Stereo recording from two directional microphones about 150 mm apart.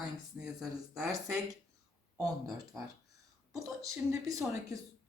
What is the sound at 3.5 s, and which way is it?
Speech, 20° right (ahead or behind).